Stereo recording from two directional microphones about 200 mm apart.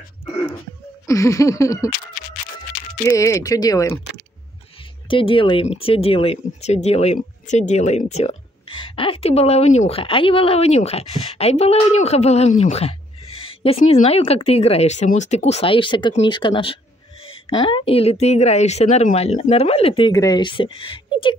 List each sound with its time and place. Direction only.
1.0 s speech: 15° left (ahead or behind)
3.2 s speech: 15° left (ahead or behind)
5.0 s a woman's voice: 25° left (ahead or behind)